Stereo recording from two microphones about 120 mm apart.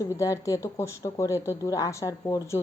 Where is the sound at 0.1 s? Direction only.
25° left (ahead or behind).